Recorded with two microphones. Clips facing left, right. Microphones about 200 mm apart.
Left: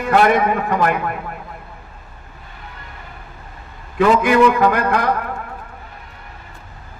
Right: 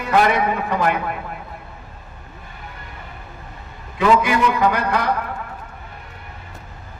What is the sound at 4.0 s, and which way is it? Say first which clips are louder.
A man's voice: left 4 dB; 50° left (ahead or behind).